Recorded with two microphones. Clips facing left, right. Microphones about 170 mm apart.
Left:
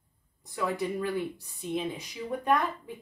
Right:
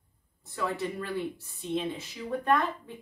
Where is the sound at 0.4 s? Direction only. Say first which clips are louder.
Left 1 dB; 15° left (ahead or behind).